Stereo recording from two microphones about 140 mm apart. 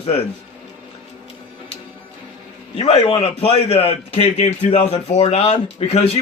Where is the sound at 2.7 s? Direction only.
40° left (ahead or behind).